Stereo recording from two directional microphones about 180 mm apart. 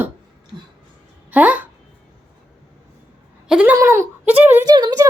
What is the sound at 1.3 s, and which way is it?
Speech, 10° right (ahead or behind).